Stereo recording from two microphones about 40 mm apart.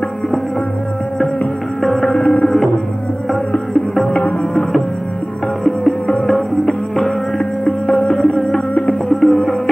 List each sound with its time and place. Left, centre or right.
1.8 s music: centre
2.0 s music: left
4.1 s music: left
5.6 s music: centre
7.9 s music: left
9.1 s music: centre